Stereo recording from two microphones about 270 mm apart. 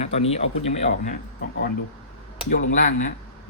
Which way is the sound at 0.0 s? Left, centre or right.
Left.